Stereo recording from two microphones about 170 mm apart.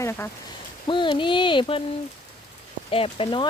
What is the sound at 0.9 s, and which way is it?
Speech, 30° left (ahead or behind).